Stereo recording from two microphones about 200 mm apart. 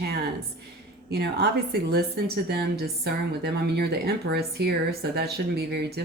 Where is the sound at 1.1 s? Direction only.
55° right (ahead or behind).